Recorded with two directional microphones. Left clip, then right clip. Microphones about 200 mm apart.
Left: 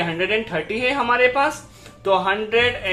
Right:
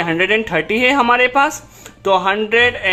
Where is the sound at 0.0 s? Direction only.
30° right (ahead or behind).